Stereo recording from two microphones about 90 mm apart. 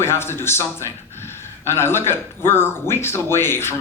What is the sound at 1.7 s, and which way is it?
A man's voice, 25° left (ahead or behind).